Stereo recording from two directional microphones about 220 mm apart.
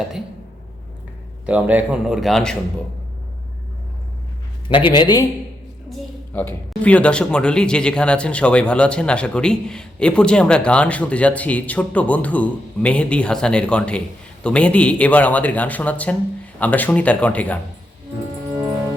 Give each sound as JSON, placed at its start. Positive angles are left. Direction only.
{"t": 1.5, "sound": "a woman's voice", "side_deg": -5}
{"t": 4.7, "sound": "a man's voice", "side_deg": 20}
{"t": 5.9, "sound": "a woman's voice", "side_deg": 10}